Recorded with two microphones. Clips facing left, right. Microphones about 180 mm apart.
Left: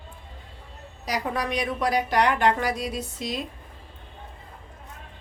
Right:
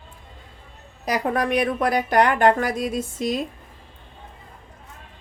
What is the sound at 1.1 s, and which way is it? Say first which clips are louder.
A woman's voice: right 5 dB; 55° right (ahead or behind).